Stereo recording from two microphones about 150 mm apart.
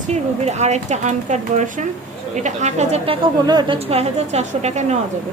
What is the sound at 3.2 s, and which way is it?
Speech, 30° right (ahead or behind).